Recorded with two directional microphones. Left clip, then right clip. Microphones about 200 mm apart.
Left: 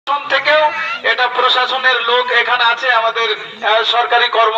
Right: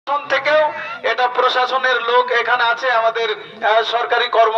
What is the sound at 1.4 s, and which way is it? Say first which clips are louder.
A man's voice: left 2 dB; 25° right (ahead or behind).